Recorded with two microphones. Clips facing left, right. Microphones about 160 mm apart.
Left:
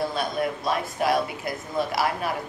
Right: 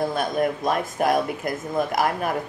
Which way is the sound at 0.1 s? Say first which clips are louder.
Right 4 dB; 50° right (ahead or behind).